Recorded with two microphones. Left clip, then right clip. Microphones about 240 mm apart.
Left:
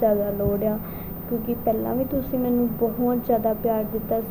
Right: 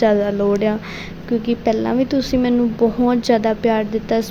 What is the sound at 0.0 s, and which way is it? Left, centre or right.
A woman's voice, right.